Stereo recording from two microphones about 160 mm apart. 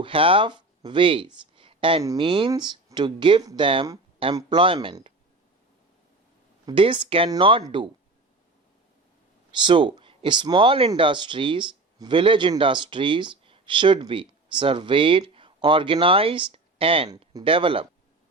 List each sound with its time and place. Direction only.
0.0 s speech: 35° right (ahead or behind)
6.7 s speech: 30° right (ahead or behind)
9.6 s speech: 30° right (ahead or behind)